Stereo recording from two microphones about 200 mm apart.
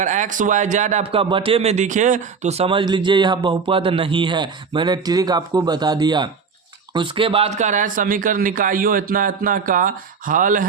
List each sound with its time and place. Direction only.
0.0 s a man's voice: 40° right (ahead or behind)